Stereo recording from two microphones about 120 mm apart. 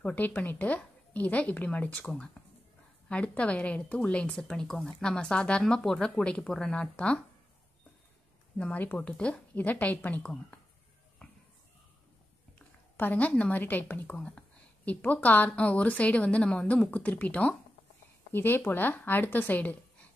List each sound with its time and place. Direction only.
0.0 s a woman's voice: 15° left (ahead or behind)
8.5 s a woman's voice: 10° left (ahead or behind)
12.5 s a woman's voice: 15° left (ahead or behind)